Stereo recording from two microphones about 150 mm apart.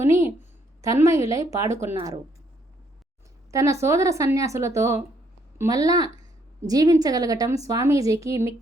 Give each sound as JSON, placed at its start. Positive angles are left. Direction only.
{"t": 0.1, "sound": "a sound", "side_deg": -20}
{"t": 0.8, "sound": "a woman's voice", "side_deg": -20}
{"t": 3.5, "sound": "a woman's voice", "side_deg": -20}